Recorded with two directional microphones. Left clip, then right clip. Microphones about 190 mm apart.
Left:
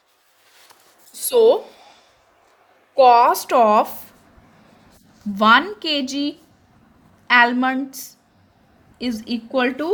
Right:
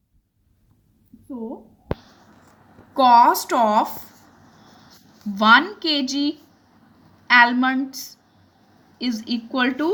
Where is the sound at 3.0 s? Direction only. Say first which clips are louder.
Left 1 dB; 40° left (ahead or behind).